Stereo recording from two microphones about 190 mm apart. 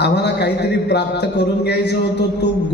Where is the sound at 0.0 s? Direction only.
60° left (ahead or behind).